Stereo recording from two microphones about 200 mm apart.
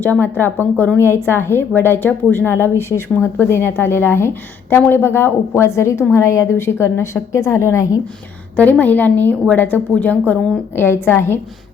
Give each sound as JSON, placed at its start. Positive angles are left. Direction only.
{"t": 0.0, "sound": "speech", "side_deg": 10}